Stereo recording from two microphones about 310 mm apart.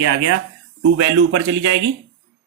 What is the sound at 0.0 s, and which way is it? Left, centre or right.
Speech, right.